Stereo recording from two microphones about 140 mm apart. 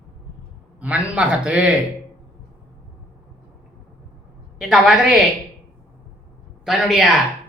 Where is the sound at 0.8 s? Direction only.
10° right (ahead or behind).